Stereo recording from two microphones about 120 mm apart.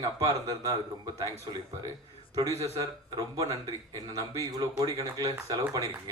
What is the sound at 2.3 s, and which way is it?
A man's voice, 30° right (ahead or behind).